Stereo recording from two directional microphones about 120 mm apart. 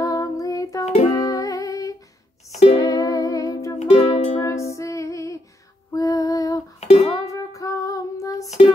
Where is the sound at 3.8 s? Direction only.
65° left (ahead or behind).